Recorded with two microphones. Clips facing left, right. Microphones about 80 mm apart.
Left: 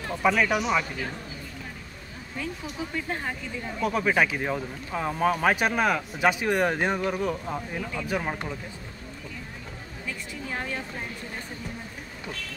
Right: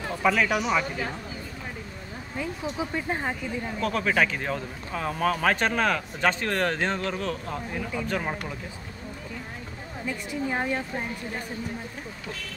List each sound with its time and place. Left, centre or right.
0.1 s speech: centre
2.3 s speech: right
3.8 s speech: centre
10.0 s speech: right